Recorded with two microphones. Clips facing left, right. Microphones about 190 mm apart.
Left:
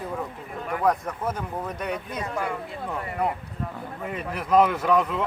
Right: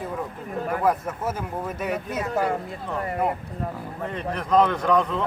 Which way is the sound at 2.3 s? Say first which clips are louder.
Right 6 dB; 40° right (ahead or behind).